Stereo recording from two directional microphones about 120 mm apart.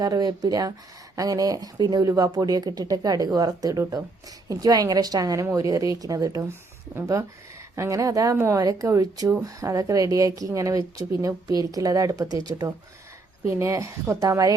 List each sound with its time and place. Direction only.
0.0 s speech: 35° right (ahead or behind)